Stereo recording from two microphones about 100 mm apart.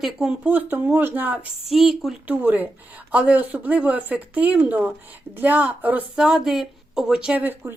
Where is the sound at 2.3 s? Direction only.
20° right (ahead or behind).